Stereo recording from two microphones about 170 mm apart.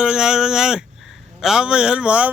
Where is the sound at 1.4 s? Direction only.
5° right (ahead or behind).